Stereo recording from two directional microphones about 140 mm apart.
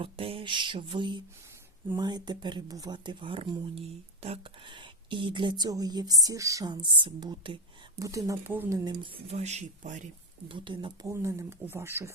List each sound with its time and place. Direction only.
0.0 s speech: 40° right (ahead or behind)
7.9 s speech: 25° right (ahead or behind)
8.8 s speech: 35° right (ahead or behind)
9.4 s speech: 55° right (ahead or behind)
10.5 s speech: 35° right (ahead or behind)
11.1 s speech: 20° right (ahead or behind)